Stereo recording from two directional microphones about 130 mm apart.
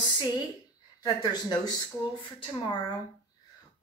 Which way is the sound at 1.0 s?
30° left (ahead or behind).